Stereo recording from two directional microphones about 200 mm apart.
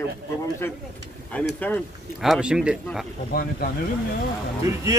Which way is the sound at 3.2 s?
50° left (ahead or behind).